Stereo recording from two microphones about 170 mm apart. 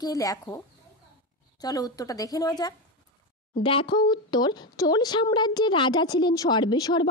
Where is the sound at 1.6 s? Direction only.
20° left (ahead or behind).